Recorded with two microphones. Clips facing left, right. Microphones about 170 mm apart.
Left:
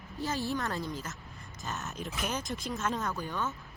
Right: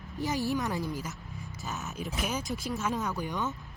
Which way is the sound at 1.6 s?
Centre (ahead or behind).